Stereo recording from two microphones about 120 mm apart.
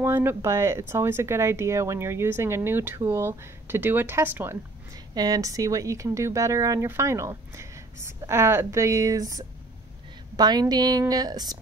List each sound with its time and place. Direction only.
0.0 s speech: 20° right (ahead or behind)
4.9 s speech: 30° right (ahead or behind)